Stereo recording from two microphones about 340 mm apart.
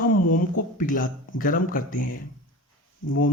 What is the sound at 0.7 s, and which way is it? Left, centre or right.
Speech, left.